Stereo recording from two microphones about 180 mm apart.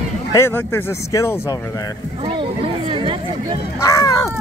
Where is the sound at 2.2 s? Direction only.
30° right (ahead or behind).